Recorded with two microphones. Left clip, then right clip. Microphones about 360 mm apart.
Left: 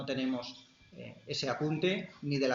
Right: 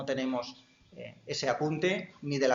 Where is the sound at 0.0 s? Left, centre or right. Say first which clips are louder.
Right 3 dB; centre.